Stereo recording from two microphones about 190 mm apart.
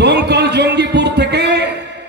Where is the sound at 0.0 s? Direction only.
60° right (ahead or behind).